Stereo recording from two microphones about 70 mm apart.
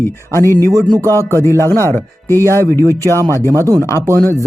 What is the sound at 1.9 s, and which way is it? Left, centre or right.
Speech, left.